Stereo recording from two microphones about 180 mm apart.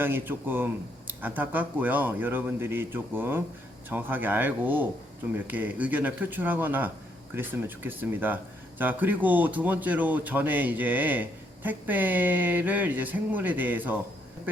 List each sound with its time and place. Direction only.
0.0 s speech: 10° right (ahead or behind)